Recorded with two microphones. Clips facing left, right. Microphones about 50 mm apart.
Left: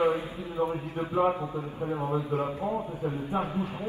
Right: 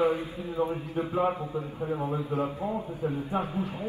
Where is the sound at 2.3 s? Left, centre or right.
Left.